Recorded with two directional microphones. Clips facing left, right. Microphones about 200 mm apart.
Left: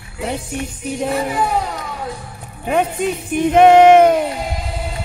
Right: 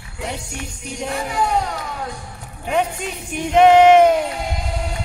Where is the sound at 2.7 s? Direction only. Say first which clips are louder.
Left 4 dB; 50° left (ahead or behind).